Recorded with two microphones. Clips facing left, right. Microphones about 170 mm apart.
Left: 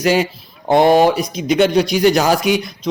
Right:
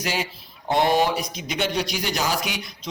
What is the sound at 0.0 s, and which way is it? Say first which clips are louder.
A man's voice: left 12 dB; 55° left (ahead or behind).